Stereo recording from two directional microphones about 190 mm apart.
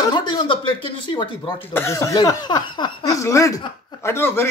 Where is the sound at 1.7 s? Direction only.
15° left (ahead or behind).